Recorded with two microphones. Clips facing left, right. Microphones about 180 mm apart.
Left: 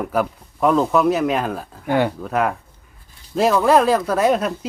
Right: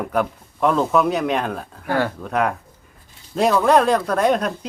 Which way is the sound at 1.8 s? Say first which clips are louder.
Left 3 dB; 20° left (ahead or behind).